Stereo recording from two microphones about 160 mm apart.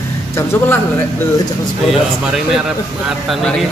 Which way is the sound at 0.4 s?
15° left (ahead or behind).